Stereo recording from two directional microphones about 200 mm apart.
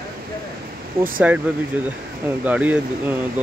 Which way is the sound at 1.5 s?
5° right (ahead or behind).